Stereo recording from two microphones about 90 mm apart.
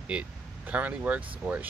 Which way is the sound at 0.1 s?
15° right (ahead or behind).